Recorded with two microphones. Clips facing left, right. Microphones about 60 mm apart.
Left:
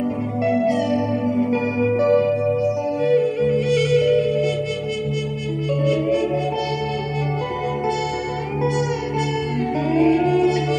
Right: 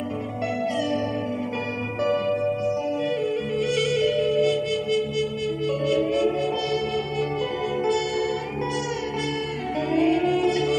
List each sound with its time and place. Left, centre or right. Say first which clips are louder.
1.8 s music: left 8 dB; left
5.9 s music: left 3 dB; left
9.8 s music: left 4 dB; left